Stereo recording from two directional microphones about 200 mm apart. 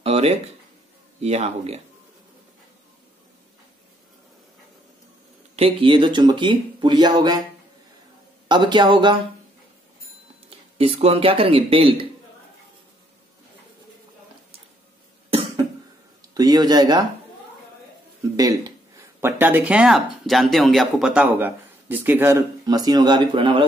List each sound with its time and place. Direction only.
0.0 s a sound: 30° right (ahead or behind)
1.2 s speech: 30° right (ahead or behind)
5.6 s speech: 25° right (ahead or behind)
8.5 s speech: 20° right (ahead or behind)
10.8 s speech: 30° right (ahead or behind)
15.2 s cough: 25° right (ahead or behind)
16.2 s speech: 20° right (ahead or behind)
18.3 s speech: 20° right (ahead or behind)